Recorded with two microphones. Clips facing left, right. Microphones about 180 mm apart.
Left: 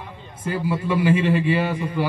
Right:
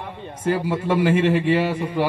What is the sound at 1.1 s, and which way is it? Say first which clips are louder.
Speech: right 2 dB; 55° right (ahead or behind).